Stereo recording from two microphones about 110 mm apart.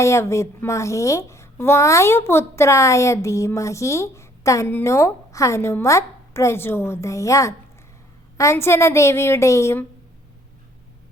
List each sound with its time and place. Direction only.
0.0 s a woman's voice: 25° left (ahead or behind)